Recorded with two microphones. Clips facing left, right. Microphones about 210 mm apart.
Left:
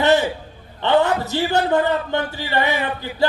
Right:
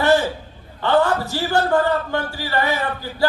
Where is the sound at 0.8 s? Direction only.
20° left (ahead or behind).